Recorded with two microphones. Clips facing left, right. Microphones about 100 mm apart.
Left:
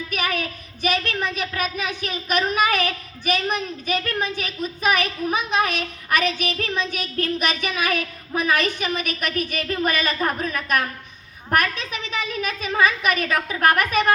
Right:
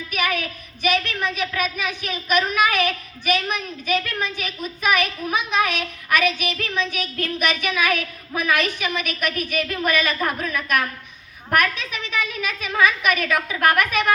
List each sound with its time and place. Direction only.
0.1 s speech: 35° left (ahead or behind)